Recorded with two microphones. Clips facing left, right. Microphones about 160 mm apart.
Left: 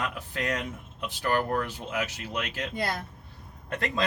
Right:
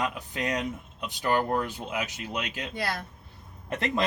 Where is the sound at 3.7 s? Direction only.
20° right (ahead or behind).